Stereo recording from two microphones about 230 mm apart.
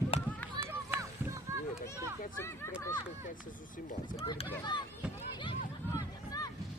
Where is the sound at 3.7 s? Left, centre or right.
Left.